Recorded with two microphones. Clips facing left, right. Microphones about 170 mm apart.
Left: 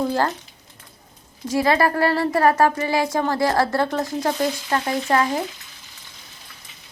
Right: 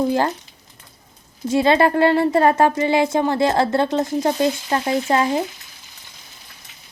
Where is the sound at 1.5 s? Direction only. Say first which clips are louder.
Right 3 dB; 25° right (ahead or behind).